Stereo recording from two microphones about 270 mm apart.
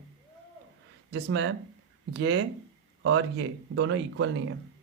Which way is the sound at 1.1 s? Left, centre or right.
Right.